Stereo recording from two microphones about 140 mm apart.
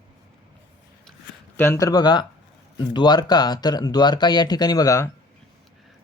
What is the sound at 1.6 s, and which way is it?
Speech, 20° left (ahead or behind).